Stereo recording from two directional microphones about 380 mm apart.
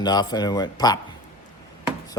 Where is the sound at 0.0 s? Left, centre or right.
Centre.